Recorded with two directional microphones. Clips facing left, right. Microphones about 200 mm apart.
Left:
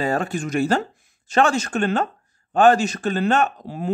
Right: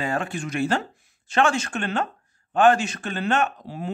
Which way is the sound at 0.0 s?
40° left (ahead or behind).